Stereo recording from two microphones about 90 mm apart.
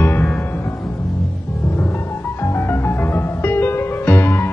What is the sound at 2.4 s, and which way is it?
Music, 25° left (ahead or behind).